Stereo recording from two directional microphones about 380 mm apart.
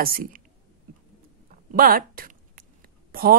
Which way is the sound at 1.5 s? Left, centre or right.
Right.